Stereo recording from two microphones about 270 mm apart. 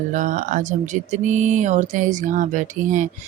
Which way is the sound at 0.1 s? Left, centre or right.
Right.